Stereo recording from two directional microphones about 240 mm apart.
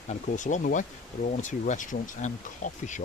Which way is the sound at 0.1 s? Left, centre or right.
Left.